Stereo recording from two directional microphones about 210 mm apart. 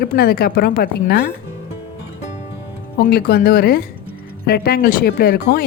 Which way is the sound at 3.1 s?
45° left (ahead or behind).